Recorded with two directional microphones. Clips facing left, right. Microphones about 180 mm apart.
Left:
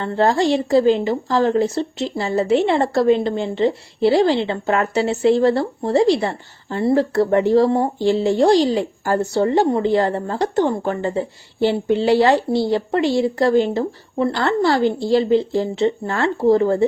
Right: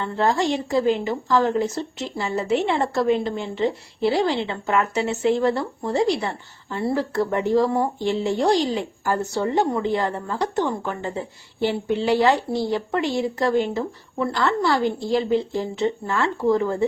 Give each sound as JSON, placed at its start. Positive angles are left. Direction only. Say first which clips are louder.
{"t": 0.0, "sound": "a woman's voice", "louder": "left 4 dB", "side_deg": 35}